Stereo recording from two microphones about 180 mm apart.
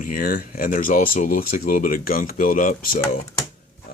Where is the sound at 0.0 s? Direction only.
50° left (ahead or behind).